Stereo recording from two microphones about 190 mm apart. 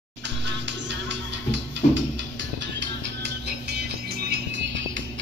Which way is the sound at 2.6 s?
65° right (ahead or behind).